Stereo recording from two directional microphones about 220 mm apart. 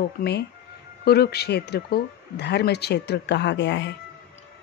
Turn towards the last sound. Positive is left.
turn(degrees=55)  # may be behind; listen again after turning